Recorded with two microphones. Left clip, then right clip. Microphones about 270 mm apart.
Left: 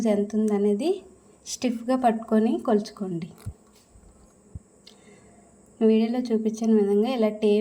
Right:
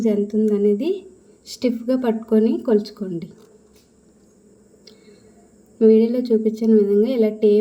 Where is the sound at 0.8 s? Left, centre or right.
Centre.